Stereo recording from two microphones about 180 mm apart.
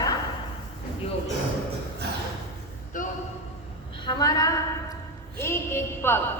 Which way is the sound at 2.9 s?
45° left (ahead or behind).